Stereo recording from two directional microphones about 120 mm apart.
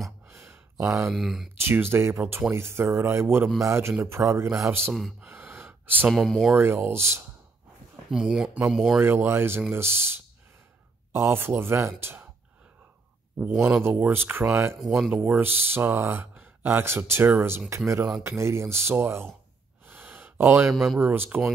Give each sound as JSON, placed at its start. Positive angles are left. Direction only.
{"t": 0.3, "sound": "a sound", "side_deg": -25}
{"t": 1.1, "sound": "speech", "side_deg": 0}
{"t": 1.6, "sound": "speech", "side_deg": -20}
{"t": 5.2, "sound": "gasp", "side_deg": -20}
{"t": 6.0, "sound": "speech", "side_deg": 0}
{"t": 6.6, "sound": "speech", "side_deg": -20}
{"t": 8.1, "sound": "speech", "side_deg": -5}
{"t": 9.0, "sound": "speech", "side_deg": -20}
{"t": 13.6, "sound": "speech", "side_deg": -10}
{"t": 14.8, "sound": "speech", "side_deg": -5}
{"t": 15.2, "sound": "speech", "side_deg": -15}
{"t": 19.9, "sound": "gasp", "side_deg": -15}
{"t": 20.6, "sound": "speech", "side_deg": 0}
{"t": 21.0, "sound": "speech", "side_deg": -15}